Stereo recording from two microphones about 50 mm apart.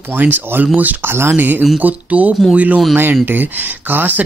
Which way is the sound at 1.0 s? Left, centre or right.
Right.